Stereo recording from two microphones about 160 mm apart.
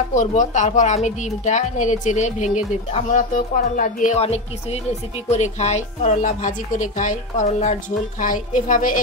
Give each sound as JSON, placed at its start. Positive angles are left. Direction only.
{"t": 0.1, "sound": "a woman's voice", "side_deg": 50}
{"t": 4.2, "sound": "a woman's voice", "side_deg": 40}